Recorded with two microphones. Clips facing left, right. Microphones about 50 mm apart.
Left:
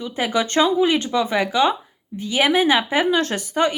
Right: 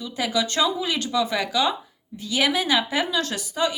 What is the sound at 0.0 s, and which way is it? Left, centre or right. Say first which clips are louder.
Speech: left 3 dB; left.